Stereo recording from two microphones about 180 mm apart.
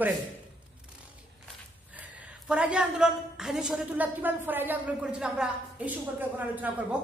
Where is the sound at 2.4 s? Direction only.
5° right (ahead or behind).